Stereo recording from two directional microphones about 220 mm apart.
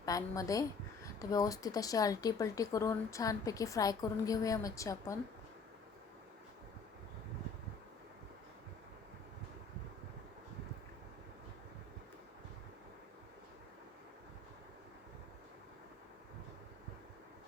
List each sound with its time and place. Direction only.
0.0 s speech: 15° left (ahead or behind)